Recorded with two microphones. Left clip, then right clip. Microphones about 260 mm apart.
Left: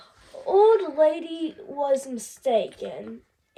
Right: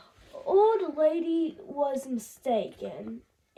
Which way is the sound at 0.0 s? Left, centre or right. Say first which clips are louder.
Left 3 dB; right.